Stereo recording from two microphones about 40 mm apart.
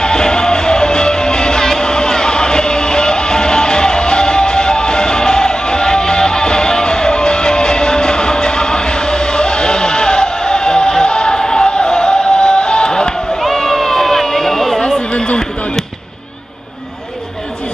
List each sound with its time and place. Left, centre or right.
0.0 s music: centre
13.4 s run: centre
15.0 s a sound: left